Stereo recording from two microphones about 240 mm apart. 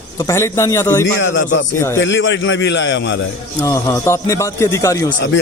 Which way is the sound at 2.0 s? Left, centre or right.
Left.